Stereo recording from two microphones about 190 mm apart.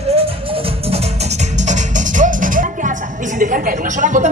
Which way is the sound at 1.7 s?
45° right (ahead or behind).